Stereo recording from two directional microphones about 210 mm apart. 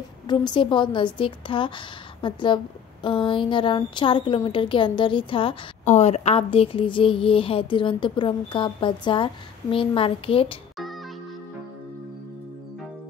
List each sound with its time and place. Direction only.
0.3 s a woman's voice: 20° left (ahead or behind)